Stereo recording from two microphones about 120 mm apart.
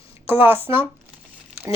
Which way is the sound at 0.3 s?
15° right (ahead or behind).